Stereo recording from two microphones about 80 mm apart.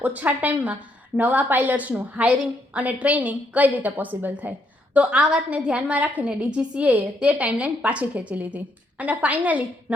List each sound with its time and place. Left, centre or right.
0.0 s a woman's voice: right